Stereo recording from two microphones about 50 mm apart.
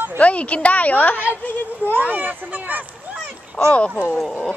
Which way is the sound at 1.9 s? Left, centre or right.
Right.